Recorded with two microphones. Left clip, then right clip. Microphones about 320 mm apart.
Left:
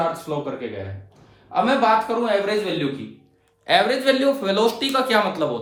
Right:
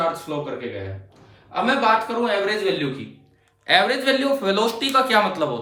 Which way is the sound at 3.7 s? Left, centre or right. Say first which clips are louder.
Even; centre.